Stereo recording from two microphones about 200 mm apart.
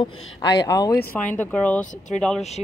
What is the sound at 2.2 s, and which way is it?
Speech, 5° left (ahead or behind).